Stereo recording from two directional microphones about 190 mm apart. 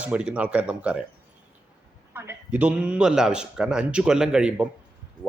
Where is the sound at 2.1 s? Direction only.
10° right (ahead or behind).